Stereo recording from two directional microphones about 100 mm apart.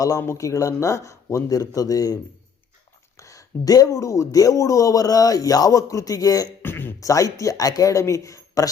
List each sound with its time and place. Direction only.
0.2 s speech: 30° left (ahead or behind)
3.2 s speech: 30° left (ahead or behind)
6.6 s speech: 20° left (ahead or behind)
7.0 s speech: 35° left (ahead or behind)